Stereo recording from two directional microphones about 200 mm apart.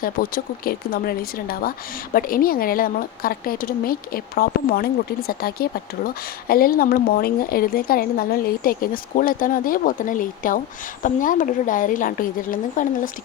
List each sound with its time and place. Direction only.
0.0 s a woman's voice: 45° left (ahead or behind)